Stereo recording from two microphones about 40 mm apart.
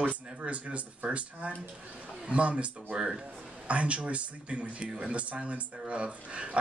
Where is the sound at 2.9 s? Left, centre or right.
Centre.